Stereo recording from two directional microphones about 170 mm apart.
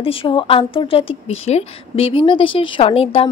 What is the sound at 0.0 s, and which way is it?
A woman's voice, 30° left (ahead or behind).